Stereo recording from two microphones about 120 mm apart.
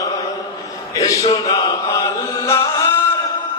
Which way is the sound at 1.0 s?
30° left (ahead or behind).